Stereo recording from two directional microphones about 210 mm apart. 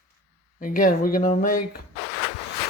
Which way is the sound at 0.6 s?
40° left (ahead or behind).